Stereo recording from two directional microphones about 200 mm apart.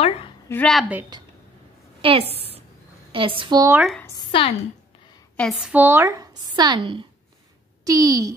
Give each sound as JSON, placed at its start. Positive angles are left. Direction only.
{"t": 0.5, "sound": "a woman's voice", "side_deg": 5}
{"t": 1.1, "sound": "a woman's voice", "side_deg": -20}
{"t": 2.0, "sound": "a sound", "side_deg": -30}
{"t": 3.1, "sound": "speech", "side_deg": -25}
{"t": 3.7, "sound": "a woman's voice", "side_deg": 0}
{"t": 4.0, "sound": "a woman's voice", "side_deg": 25}
{"t": 5.3, "sound": "a woman's voice", "side_deg": 5}
{"t": 5.7, "sound": "a woman's voice", "side_deg": -10}